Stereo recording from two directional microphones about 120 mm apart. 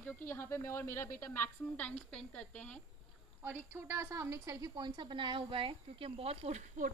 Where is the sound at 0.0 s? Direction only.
15° left (ahead or behind).